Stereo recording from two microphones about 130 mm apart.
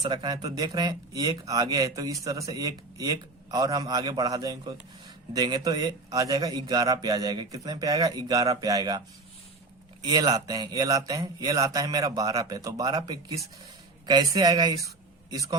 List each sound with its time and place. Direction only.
0.0 s a man's voice: 35° right (ahead or behind)
10.0 s a man's voice: 30° right (ahead or behind)